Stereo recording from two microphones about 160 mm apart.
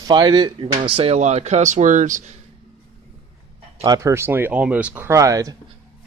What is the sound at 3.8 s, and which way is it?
Speech, 20° right (ahead or behind).